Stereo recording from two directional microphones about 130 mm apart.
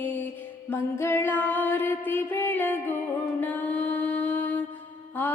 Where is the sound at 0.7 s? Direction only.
20° left (ahead or behind).